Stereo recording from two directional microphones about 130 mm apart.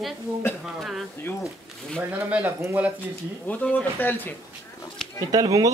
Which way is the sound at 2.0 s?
15° right (ahead or behind).